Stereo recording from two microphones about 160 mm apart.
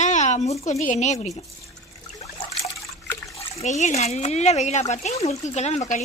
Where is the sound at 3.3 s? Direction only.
40° left (ahead or behind).